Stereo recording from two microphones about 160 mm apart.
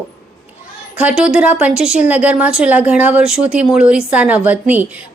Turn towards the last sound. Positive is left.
turn(degrees=-10)  # may be behind; listen again after turning